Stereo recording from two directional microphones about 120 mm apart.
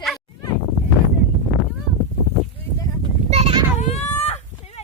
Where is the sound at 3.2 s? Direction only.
55° right (ahead or behind).